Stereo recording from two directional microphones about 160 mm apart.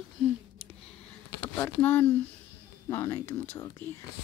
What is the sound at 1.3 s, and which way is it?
Speech, 25° left (ahead or behind).